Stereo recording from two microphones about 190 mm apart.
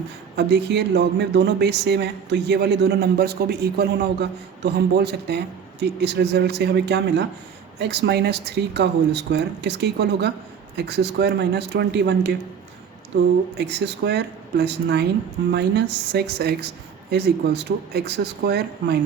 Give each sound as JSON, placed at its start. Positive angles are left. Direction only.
{"t": 0.3, "sound": "speech", "side_deg": -60}
{"t": 13.6, "sound": "speech", "side_deg": -65}